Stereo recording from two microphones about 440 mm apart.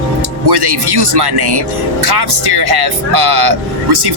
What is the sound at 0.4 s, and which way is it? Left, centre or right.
Speech, right.